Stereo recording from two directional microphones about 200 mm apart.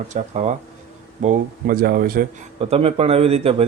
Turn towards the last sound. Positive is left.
turn(degrees=-30)  # may be behind; listen again after turning